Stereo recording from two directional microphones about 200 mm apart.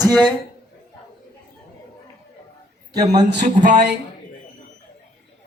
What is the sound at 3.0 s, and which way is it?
Speech, 20° right (ahead or behind).